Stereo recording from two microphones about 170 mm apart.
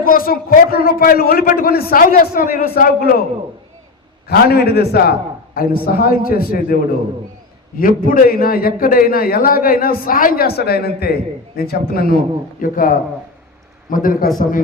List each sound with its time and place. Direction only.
0.0 s a man's voice: 60° left (ahead or behind)
4.3 s a man's voice: 70° left (ahead or behind)
7.8 s a man's voice: 55° left (ahead or behind)